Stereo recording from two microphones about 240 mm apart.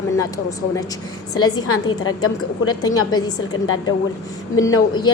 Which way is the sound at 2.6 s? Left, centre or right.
Centre.